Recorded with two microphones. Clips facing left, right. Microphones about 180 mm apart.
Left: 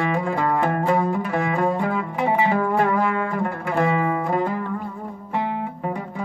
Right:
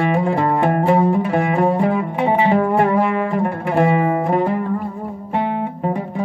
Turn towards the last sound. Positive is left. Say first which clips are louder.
# right 6 dB
turn(degrees=-25)  # may be behind; listen again after turning